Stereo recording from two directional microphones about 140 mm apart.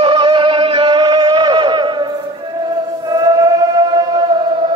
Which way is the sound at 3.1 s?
25° right (ahead or behind).